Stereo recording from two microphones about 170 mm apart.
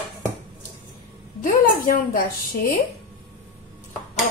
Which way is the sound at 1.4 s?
55° left (ahead or behind).